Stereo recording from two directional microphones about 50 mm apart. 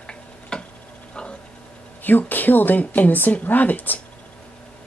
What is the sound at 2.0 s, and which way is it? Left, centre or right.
Speech, left.